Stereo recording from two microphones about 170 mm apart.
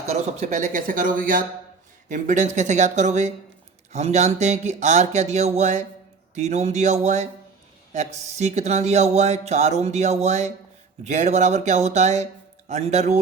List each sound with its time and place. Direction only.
0.1 s speech: 40° right (ahead or behind)